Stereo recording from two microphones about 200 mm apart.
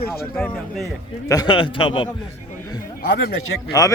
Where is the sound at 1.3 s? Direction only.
20° left (ahead or behind).